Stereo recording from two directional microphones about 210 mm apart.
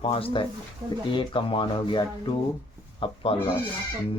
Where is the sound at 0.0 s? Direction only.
25° left (ahead or behind).